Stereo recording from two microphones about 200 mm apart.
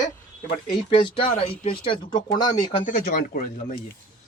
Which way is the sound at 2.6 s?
40° left (ahead or behind).